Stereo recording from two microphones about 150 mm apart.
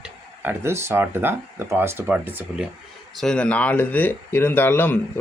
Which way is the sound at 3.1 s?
5° left (ahead or behind).